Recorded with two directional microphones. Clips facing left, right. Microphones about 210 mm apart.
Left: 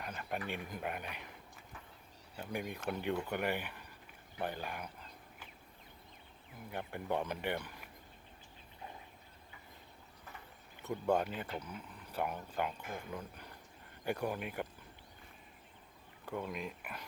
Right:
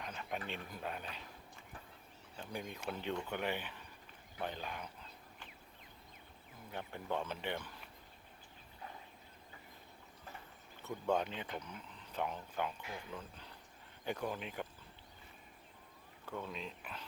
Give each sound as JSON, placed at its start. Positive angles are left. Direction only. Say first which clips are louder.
{"t": 0.0, "sound": "speech", "louder": "left 2 dB", "side_deg": 5}
{"t": 2.3, "sound": "speech", "louder": "left 4 dB", "side_deg": 10}
{"t": 6.7, "sound": "speech", "louder": "left 3 dB", "side_deg": 10}
{"t": 10.8, "sound": "speech", "louder": "left 3 dB", "side_deg": 10}
{"t": 12.8, "sound": "speech", "louder": "left 3 dB", "side_deg": 50}
{"t": 13.1, "sound": "speech", "louder": "left 3 dB", "side_deg": 10}
{"t": 16.2, "sound": "speech", "louder": "left 4 dB", "side_deg": 10}